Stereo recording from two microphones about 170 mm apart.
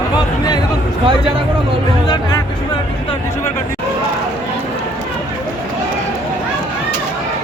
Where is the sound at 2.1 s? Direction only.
25° left (ahead or behind).